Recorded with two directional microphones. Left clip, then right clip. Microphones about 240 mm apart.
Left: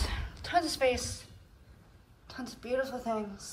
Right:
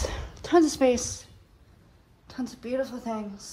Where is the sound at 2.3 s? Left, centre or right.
Centre.